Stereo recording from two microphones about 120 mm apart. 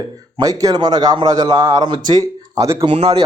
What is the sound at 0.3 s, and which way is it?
Speech, 35° right (ahead or behind).